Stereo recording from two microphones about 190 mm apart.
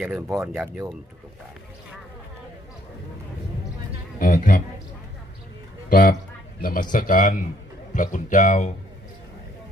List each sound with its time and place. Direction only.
0.0 s speech: 10° right (ahead or behind)
4.2 s a man's voice: 50° left (ahead or behind)
5.9 s a man's voice: 45° left (ahead or behind)